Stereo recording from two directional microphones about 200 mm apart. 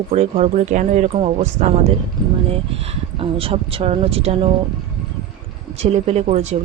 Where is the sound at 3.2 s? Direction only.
30° right (ahead or behind).